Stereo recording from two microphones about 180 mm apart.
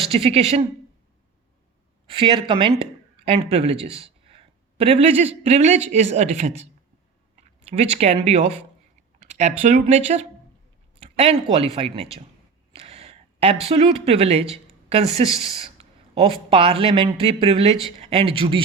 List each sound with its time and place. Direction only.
0.1 s speech: 35° right (ahead or behind)
2.0 s speech: 30° right (ahead or behind)
7.7 s speech: 35° right (ahead or behind)
12.7 s a sound: 35° right (ahead or behind)
13.7 s speech: 35° right (ahead or behind)